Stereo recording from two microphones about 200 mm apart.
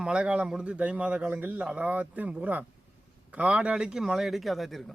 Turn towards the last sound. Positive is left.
turn(degrees=0)  # may be behind; listen again after turning